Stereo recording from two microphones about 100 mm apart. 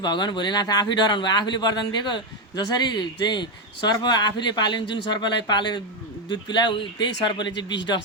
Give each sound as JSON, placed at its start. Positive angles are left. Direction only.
{"t": 0.0, "sound": "speech", "side_deg": 45}